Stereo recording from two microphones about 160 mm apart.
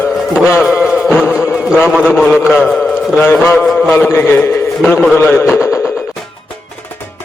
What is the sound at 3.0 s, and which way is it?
Speech, centre (ahead or behind).